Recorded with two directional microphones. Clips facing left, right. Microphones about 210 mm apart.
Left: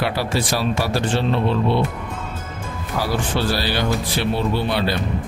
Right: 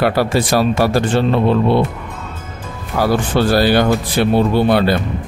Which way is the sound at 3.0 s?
50° right (ahead or behind).